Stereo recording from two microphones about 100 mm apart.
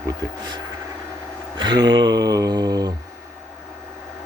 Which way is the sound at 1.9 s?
45° right (ahead or behind).